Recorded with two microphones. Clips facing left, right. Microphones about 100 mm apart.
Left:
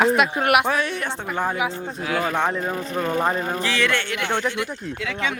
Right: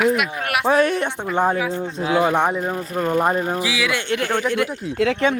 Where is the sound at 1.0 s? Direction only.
20° right (ahead or behind); by 4.0 s 5° right (ahead or behind).